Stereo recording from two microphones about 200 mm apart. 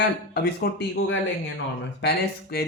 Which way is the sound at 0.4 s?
55° left (ahead or behind).